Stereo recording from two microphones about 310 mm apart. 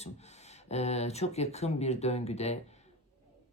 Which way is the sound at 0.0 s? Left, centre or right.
Left.